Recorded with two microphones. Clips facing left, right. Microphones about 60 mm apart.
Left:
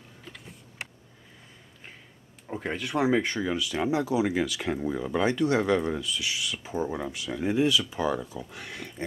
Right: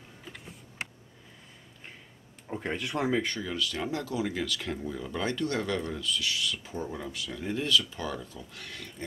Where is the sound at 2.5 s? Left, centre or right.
Centre.